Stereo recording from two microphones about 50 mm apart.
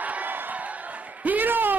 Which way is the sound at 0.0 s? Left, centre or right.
Right.